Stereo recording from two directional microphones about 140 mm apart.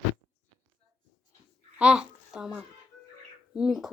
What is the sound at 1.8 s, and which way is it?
A child's voice, 5° right (ahead or behind).